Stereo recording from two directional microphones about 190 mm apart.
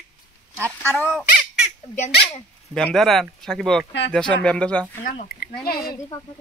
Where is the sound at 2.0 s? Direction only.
35° left (ahead or behind).